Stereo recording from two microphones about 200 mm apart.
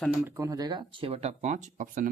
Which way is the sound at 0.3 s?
15° right (ahead or behind).